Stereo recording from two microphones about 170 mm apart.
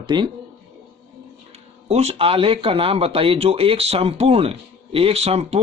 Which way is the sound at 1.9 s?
35° right (ahead or behind).